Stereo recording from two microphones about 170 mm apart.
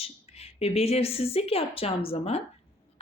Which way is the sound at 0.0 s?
35° left (ahead or behind).